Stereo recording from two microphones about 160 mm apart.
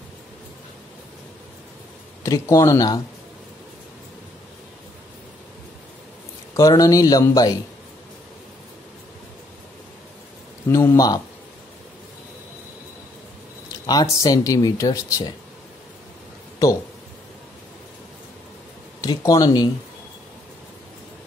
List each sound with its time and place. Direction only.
2.2 s speech: 20° left (ahead or behind)
6.5 s speech: 20° left (ahead or behind)
10.7 s speech: 20° left (ahead or behind)
13.8 s speech: 20° left (ahead or behind)
19.0 s speech: 20° left (ahead or behind)